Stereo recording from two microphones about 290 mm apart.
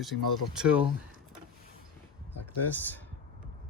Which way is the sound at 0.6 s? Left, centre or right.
Centre.